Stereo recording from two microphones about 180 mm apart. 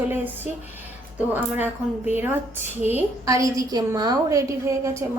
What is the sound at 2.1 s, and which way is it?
A woman's voice, 10° right (ahead or behind).